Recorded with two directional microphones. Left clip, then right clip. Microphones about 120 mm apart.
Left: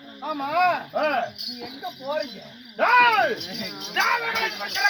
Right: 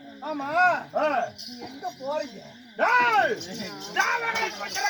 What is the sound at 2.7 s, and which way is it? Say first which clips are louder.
Speech: left 3 dB; 15° left (ahead or behind).